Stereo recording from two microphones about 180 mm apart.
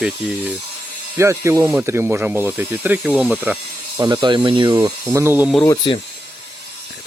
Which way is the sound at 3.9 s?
20° right (ahead or behind).